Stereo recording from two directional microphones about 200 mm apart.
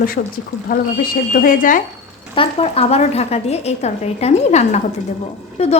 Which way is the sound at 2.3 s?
30° left (ahead or behind).